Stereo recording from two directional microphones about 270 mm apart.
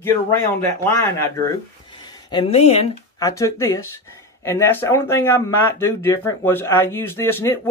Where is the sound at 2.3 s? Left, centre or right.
Left.